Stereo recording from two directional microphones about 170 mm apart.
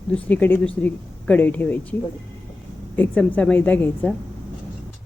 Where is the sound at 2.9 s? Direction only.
10° left (ahead or behind).